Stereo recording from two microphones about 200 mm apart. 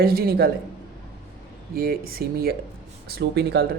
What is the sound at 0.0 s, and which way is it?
Speech, 50° right (ahead or behind).